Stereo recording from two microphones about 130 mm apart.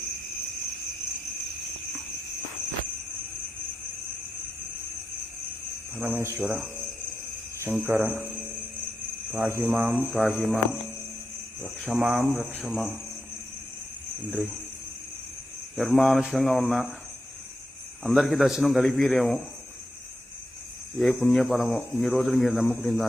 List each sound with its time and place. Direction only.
6.0 s cricket: 15° right (ahead or behind)
7.9 s cricket: 15° right (ahead or behind)
9.3 s cricket: 15° right (ahead or behind)
10.0 s speech: centre (ahead or behind)
11.9 s speech: centre (ahead or behind)
15.7 s speech: centre (ahead or behind)
18.0 s speech: centre (ahead or behind)
21.0 s speech: 5° left (ahead or behind)